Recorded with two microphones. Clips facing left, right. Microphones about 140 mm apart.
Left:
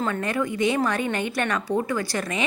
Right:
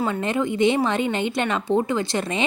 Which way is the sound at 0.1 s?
25° right (ahead or behind).